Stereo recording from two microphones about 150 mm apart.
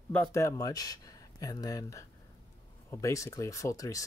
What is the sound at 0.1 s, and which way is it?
Speech, 15° left (ahead or behind).